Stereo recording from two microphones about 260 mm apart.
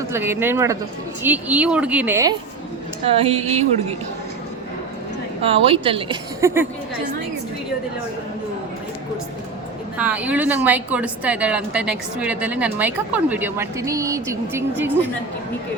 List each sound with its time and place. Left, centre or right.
0.1 s a woman's voice: centre
3.1 s speech: right
5.4 s speech: right
10.0 s a woman's voice: centre